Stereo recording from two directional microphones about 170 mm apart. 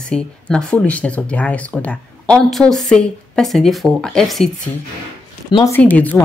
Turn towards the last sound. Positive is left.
turn(degrees=10)  # may be behind; listen again after turning